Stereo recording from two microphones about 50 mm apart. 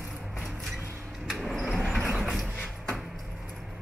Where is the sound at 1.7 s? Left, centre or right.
Centre.